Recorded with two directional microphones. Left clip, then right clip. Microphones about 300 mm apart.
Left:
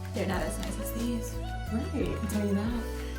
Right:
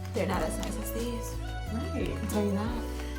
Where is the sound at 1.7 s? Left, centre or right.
Centre.